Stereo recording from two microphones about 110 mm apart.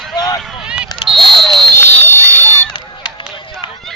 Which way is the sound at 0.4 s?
5° right (ahead or behind).